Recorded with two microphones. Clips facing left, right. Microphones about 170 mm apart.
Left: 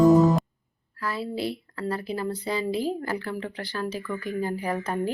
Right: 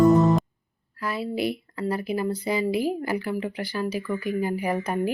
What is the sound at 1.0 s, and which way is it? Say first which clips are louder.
Speech: right 2 dB; 15° right (ahead or behind).